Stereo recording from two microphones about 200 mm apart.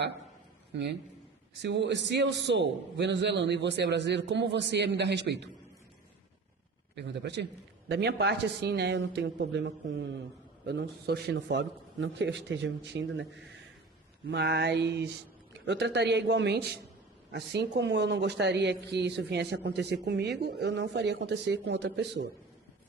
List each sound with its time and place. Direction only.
0.7 s a man's voice: 60° right (ahead or behind)
6.9 s speech: 60° right (ahead or behind)
14.3 s speech: 60° right (ahead or behind)